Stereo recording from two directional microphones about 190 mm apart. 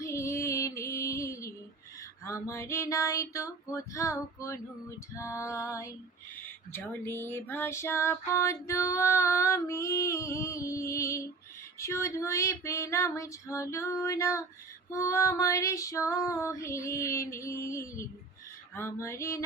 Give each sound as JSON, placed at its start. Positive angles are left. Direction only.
{"t": 0.0, "sound": "music", "side_deg": 15}
{"t": 2.2, "sound": "female singing", "side_deg": 15}